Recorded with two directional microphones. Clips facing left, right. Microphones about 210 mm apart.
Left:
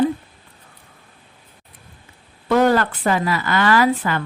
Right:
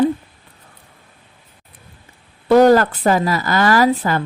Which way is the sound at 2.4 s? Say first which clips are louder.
Right 6 dB; 40° right (ahead or behind).